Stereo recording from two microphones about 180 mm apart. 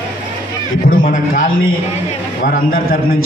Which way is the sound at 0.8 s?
50° left (ahead or behind).